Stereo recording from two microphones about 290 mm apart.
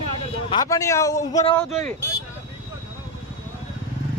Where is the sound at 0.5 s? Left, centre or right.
Centre.